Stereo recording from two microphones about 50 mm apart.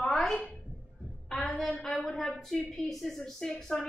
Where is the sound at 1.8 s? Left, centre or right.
Centre.